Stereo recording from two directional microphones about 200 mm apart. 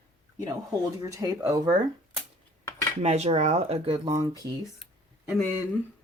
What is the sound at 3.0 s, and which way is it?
Speech, 35° right (ahead or behind).